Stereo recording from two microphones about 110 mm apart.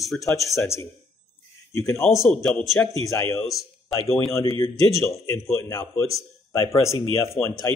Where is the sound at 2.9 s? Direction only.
30° left (ahead or behind).